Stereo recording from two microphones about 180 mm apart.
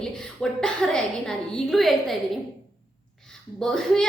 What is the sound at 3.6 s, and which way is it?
Speech, 5° left (ahead or behind).